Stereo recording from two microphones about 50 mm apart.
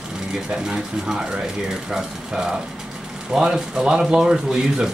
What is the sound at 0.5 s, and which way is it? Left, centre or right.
Speech, centre.